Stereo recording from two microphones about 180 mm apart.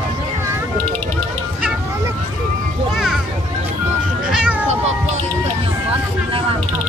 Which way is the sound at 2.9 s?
Centre (ahead or behind).